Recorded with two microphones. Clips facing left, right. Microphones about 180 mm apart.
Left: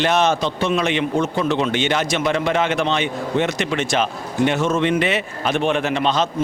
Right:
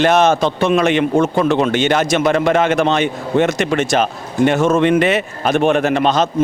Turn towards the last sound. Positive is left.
turn(degrees=-50)  # may be behind; listen again after turning